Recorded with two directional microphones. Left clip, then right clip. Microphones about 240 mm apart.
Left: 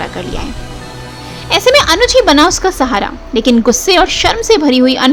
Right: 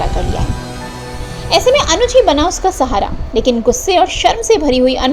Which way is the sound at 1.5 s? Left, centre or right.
Centre.